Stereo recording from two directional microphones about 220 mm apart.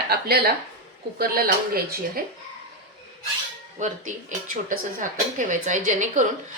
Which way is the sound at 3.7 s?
35° right (ahead or behind).